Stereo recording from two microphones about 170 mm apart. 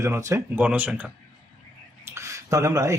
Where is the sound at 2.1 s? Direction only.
15° right (ahead or behind).